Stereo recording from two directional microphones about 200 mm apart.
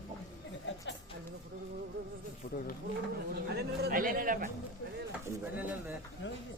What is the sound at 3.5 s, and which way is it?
A man's voice, 55° right (ahead or behind).